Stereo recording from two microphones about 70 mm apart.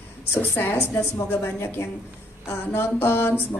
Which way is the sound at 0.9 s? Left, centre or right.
Left.